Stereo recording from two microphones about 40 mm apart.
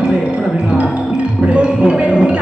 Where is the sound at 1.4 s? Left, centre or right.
Right.